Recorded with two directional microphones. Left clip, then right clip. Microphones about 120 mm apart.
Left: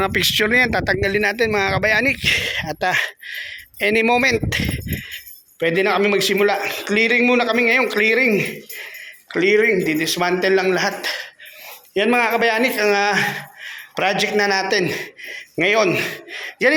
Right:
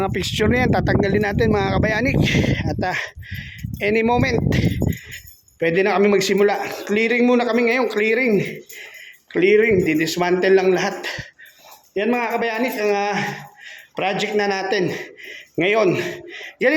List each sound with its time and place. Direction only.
0.0 s speech: 20° right (ahead or behind)
8.3 s jingle bell: 35° right (ahead or behind)
9.3 s a man's voice: 40° right (ahead or behind)
11.9 s speech: 5° right (ahead or behind)
13.9 s a man's voice: 25° right (ahead or behind)
16.3 s a sound: 25° right (ahead or behind)